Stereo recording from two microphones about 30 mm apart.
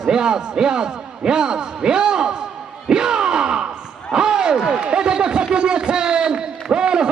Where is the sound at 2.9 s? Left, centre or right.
Right.